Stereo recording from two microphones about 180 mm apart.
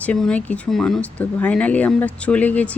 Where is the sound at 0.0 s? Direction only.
5° left (ahead or behind).